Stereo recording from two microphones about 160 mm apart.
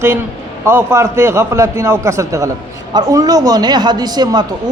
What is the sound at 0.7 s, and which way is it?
A man's voice, 15° right (ahead or behind).